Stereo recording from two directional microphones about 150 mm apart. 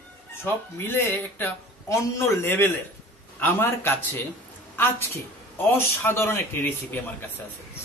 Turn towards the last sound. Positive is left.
turn(degrees=10)  # may be behind; listen again after turning